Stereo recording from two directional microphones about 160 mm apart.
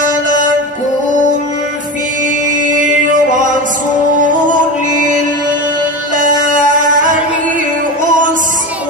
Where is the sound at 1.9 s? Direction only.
55° right (ahead or behind).